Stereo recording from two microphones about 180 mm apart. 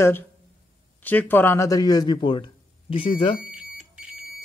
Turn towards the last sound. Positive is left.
turn(degrees=-5)  # may be behind; listen again after turning